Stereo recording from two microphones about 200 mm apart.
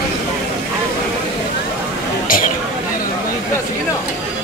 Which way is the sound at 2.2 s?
45° left (ahead or behind).